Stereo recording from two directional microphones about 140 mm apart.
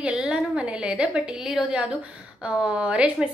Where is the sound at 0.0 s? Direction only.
5° right (ahead or behind).